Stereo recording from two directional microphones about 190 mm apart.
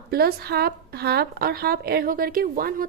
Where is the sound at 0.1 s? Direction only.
55° right (ahead or behind).